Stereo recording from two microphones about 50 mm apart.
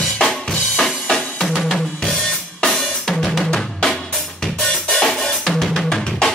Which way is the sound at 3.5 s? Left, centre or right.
Centre.